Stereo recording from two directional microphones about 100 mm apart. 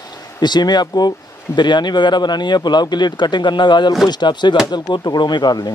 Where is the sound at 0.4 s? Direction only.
45° left (ahead or behind).